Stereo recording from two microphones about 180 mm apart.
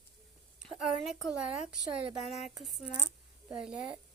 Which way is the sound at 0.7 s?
5° right (ahead or behind).